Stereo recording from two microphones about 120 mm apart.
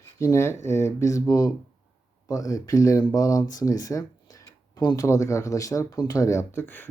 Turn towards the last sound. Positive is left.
turn(degrees=15)  # may be behind; listen again after turning